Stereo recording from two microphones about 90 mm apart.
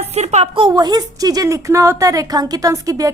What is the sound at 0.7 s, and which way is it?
A woman's voice, 50° right (ahead or behind).